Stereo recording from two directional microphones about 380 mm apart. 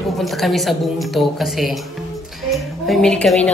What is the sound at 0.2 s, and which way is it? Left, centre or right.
A woman's voice, centre.